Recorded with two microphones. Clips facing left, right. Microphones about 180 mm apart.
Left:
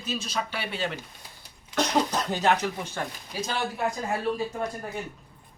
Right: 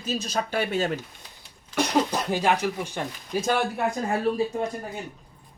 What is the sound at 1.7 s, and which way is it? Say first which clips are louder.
Speech: right 1 dB; 10° right (ahead or behind).